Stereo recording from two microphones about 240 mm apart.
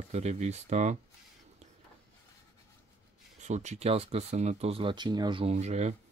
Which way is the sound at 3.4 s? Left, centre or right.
Right.